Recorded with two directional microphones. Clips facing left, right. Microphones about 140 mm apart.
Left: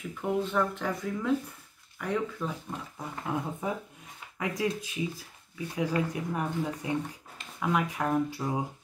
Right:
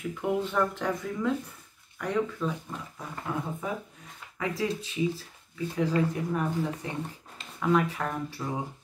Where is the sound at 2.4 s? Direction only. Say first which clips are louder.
Right 2 dB; 25° left (ahead or behind).